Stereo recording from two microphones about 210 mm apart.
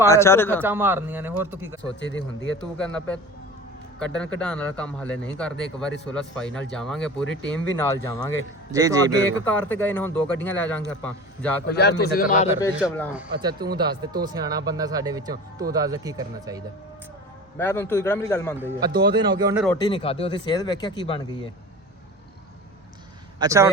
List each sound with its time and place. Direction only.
0.1 s a man's voice: 10° left (ahead or behind)
0.6 s speech: 10° right (ahead or behind)
2.0 s speech: 60° left (ahead or behind)
2.7 s a man's voice: 5° left (ahead or behind)
8.7 s speech: 15° right (ahead or behind)
9.4 s a man's voice: 10° left (ahead or behind)
11.6 s a man's voice: 50° left (ahead or behind)
13.4 s speech: 20° right (ahead or behind)
17.6 s a man's voice: 10° left (ahead or behind)
18.5 s speech: 10° right (ahead or behind)
19.7 s speech: 20° left (ahead or behind)
23.4 s speech: 15° right (ahead or behind)